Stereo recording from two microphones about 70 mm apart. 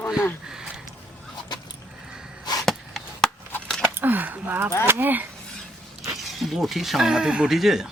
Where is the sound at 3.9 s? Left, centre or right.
Right.